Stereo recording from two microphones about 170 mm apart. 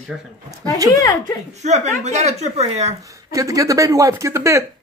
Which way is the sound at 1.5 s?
40° right (ahead or behind).